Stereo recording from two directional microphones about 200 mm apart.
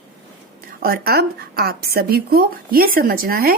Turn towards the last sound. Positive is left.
turn(degrees=-45)  # may be behind; listen again after turning